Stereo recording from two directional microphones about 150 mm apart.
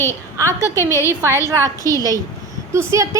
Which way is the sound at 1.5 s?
20° right (ahead or behind).